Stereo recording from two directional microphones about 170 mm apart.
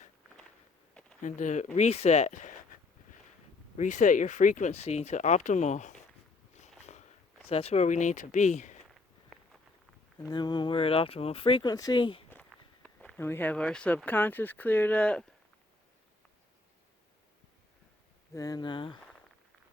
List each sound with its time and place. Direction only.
1.2 s speech: 45° left (ahead or behind)
3.8 s speech: 50° left (ahead or behind)
6.6 s sniff: 45° left (ahead or behind)
7.4 s speech: 35° left (ahead or behind)
8.9 s walk: centre (ahead or behind)
10.2 s speech: 25° left (ahead or behind)
12.3 s speech: 5° left (ahead or behind)
18.3 s speech: 20° left (ahead or behind)